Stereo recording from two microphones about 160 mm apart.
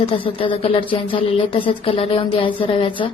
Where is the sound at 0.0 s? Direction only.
35° left (ahead or behind).